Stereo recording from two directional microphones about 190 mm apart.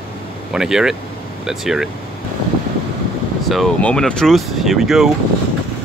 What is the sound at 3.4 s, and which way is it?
Speech, centre (ahead or behind).